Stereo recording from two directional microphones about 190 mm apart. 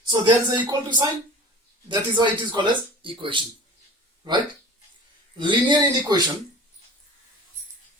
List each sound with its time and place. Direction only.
0.1 s speech: 25° right (ahead or behind)
5.4 s speech: 25° right (ahead or behind)